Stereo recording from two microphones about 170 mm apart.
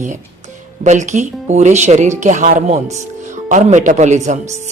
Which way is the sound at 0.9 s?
45° right (ahead or behind).